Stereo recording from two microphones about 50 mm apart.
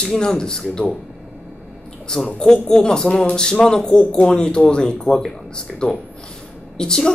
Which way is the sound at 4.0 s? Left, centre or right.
Left.